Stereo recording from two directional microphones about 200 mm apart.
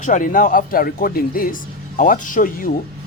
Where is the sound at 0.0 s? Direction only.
40° left (ahead or behind).